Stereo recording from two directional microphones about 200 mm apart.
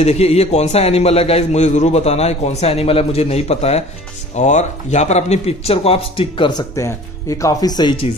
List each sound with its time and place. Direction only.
0.0 s a man's voice: 30° left (ahead or behind)